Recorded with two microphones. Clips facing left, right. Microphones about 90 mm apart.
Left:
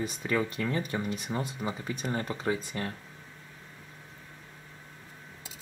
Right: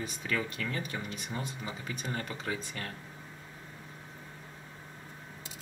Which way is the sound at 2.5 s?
20° left (ahead or behind).